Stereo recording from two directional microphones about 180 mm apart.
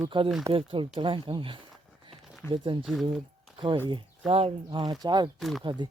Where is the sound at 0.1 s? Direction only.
25° right (ahead or behind).